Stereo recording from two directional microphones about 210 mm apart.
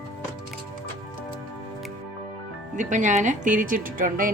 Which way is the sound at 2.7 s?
35° right (ahead or behind).